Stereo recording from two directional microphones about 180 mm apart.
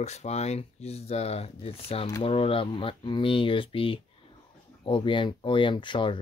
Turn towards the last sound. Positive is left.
turn(degrees=25)  # may be behind; listen again after turning